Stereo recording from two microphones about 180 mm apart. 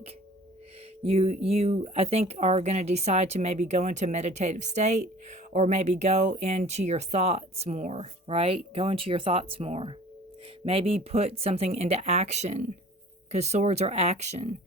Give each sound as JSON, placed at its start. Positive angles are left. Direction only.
{"t": 1.0, "sound": "speech", "side_deg": -35}